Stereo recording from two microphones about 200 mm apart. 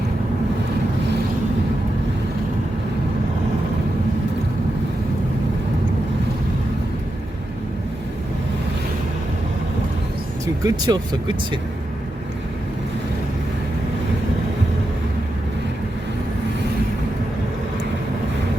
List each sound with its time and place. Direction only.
10.4 s speech: 15° right (ahead or behind)